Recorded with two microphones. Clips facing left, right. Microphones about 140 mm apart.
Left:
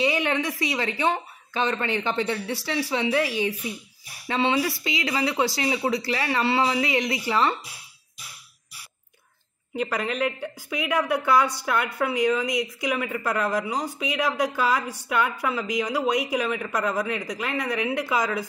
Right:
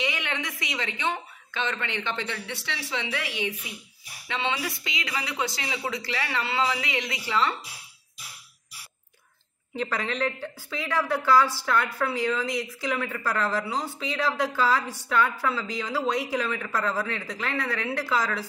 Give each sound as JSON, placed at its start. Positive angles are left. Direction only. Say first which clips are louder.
{"t": 0.0, "sound": "speech", "louder": "left 7 dB", "side_deg": 35}
{"t": 4.3, "sound": "speech", "louder": "left 6 dB", "side_deg": 35}
{"t": 9.8, "sound": "a woman's voice", "louder": "left 2 dB", "side_deg": 10}